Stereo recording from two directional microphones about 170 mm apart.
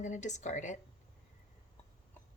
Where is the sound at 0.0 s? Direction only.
45° left (ahead or behind).